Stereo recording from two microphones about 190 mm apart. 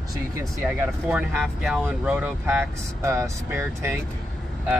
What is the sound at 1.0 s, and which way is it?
Speech, 5° right (ahead or behind).